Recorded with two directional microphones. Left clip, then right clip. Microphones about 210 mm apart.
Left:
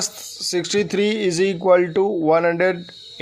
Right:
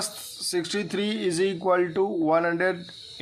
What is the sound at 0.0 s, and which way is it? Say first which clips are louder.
Speech: left 6 dB; 30° left (ahead or behind).